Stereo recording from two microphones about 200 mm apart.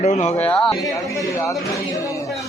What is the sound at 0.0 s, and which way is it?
Speech, 35° left (ahead or behind).